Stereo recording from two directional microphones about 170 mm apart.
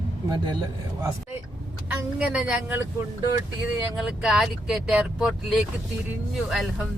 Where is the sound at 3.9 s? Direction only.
Centre (ahead or behind).